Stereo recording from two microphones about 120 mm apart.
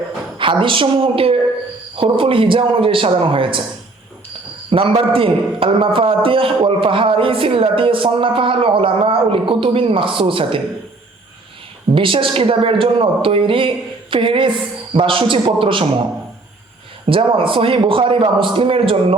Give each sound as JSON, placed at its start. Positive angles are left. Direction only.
{"t": 0.3, "sound": "a man's voice", "side_deg": -45}
{"t": 4.7, "sound": "a man's voice", "side_deg": -50}
{"t": 11.9, "sound": "a man's voice", "side_deg": -45}
{"t": 17.1, "sound": "a man's voice", "side_deg": -45}